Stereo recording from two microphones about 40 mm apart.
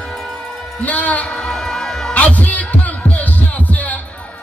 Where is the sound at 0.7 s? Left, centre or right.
Left.